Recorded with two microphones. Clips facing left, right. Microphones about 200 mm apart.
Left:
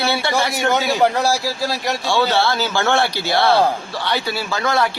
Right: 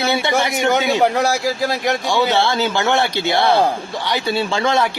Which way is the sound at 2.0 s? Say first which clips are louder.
Left 1 dB; 15° right (ahead or behind).